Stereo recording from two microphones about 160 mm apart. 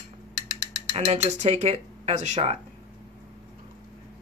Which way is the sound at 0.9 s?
35° right (ahead or behind).